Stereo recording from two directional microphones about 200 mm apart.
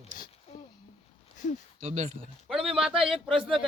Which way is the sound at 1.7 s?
35° right (ahead or behind).